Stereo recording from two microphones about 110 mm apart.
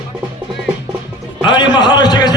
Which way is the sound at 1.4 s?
45° left (ahead or behind).